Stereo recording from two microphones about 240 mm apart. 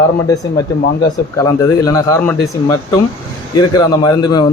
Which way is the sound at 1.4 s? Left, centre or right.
Centre.